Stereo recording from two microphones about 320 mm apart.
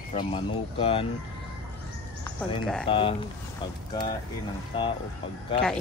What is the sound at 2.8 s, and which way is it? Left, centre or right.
Speech, centre.